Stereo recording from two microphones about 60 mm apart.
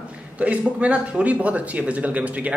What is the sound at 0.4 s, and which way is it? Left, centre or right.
A man's voice, right.